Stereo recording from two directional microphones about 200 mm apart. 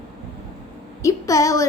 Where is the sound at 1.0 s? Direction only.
15° left (ahead or behind).